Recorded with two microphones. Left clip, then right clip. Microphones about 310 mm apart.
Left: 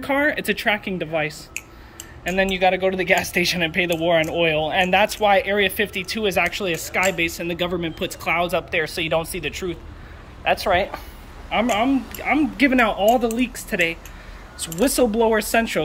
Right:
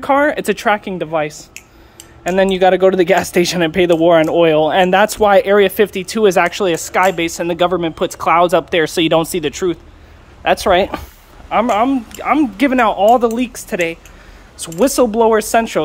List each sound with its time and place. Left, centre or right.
0.0 s speech: centre
11.5 s speech: centre